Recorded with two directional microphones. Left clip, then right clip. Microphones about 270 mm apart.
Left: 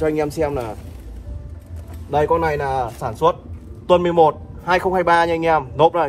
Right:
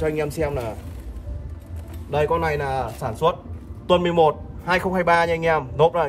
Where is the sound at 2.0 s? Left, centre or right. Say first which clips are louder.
Left 4 dB; centre.